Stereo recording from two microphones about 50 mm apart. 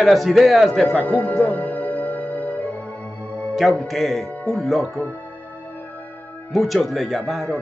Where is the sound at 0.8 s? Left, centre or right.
Left.